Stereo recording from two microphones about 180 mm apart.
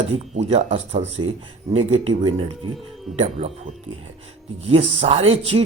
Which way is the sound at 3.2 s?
35° right (ahead or behind).